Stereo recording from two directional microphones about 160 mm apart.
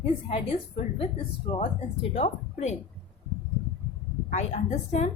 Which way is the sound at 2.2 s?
45° left (ahead or behind).